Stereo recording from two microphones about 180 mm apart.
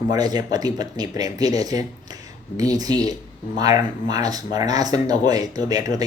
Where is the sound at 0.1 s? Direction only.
20° right (ahead or behind).